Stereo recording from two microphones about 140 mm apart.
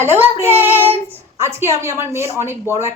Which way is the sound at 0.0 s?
15° right (ahead or behind).